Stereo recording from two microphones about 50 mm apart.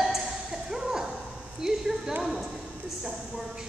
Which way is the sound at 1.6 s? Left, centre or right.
Centre.